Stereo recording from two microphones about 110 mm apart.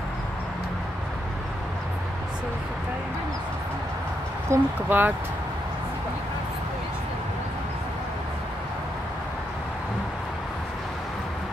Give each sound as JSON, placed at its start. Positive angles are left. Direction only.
{"t": 4.5, "sound": "speech", "side_deg": -20}